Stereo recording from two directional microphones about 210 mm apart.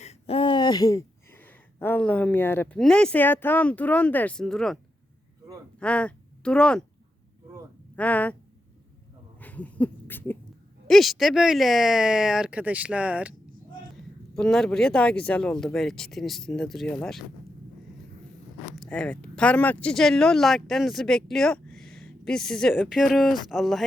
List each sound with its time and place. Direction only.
0.0 s speech: 30° left (ahead or behind); by 4.8 s centre (ahead or behind)
5.8 s speech: 5° left (ahead or behind)
7.9 s speech: 5° left (ahead or behind)
9.4 s a sound: 5° left (ahead or behind)
10.8 s speech: centre (ahead or behind)
14.3 s speech: centre (ahead or behind)
18.8 s speech: 5° left (ahead or behind)